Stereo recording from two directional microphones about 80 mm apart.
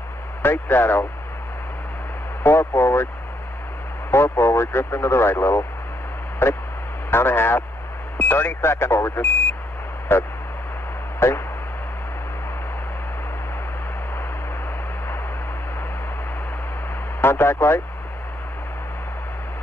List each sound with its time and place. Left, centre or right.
0.4 s speech: left
2.4 s speech: left
4.1 s speech: left
11.1 s a sound: left
17.2 s speech: left